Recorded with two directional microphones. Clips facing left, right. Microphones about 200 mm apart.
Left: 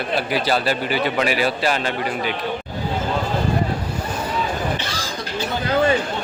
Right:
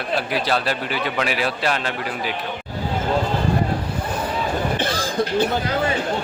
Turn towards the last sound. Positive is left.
turn(degrees=-55)  # may be behind; listen again after turning